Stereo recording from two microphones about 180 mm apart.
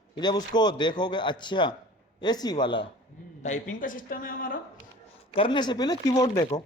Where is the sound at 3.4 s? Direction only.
45° left (ahead or behind).